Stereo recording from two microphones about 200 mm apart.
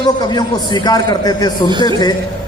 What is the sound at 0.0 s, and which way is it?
A man's voice, 20° left (ahead or behind).